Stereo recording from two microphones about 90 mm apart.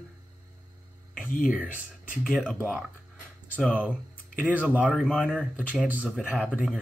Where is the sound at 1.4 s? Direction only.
15° right (ahead or behind).